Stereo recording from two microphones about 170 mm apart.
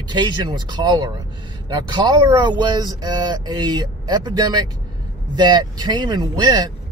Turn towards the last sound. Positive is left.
turn(degrees=-25)  # may be behind; listen again after turning